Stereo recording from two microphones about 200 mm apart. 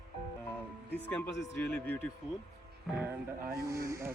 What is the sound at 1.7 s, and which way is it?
Speech, 10° left (ahead or behind).